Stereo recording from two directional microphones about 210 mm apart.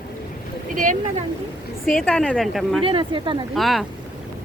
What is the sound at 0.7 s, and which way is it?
Boat, 40° right (ahead or behind).